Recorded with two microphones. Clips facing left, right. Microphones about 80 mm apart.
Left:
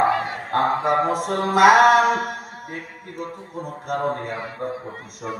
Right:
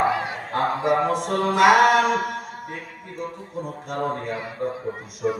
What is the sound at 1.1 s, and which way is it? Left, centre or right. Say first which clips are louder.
A man's voice: left 1 dB; left.